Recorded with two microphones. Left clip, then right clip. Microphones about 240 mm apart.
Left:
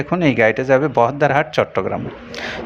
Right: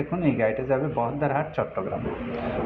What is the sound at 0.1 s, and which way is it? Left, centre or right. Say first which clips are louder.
Speech: left 10 dB; left.